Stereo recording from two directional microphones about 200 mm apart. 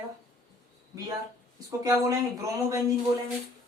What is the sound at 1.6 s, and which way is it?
Speech, 15° right (ahead or behind).